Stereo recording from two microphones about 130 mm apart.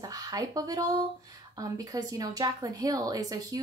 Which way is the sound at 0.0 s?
30° right (ahead or behind).